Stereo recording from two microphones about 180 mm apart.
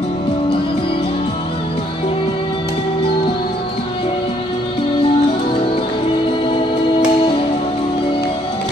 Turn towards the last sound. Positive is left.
turn(degrees=30)  # may be behind; listen again after turning